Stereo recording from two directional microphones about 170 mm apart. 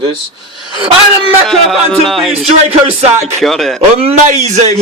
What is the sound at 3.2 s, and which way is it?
Speech, 40° right (ahead or behind).